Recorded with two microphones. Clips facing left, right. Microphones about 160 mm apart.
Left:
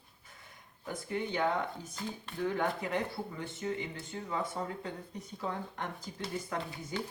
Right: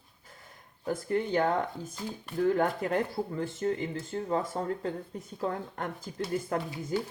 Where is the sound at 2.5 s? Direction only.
45° right (ahead or behind).